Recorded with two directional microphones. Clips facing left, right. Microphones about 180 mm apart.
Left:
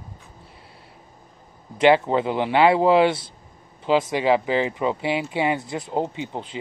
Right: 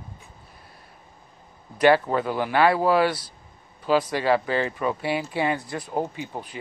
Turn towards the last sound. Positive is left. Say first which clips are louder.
# left 3 dB
turn(degrees=20)  # may be behind; listen again after turning